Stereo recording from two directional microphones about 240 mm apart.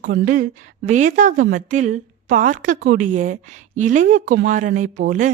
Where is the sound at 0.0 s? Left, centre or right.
Right.